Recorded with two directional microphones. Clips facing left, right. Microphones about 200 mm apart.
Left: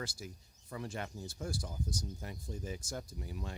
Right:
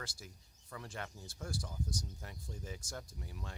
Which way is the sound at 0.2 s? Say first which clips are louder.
Left 7 dB; 10° left (ahead or behind).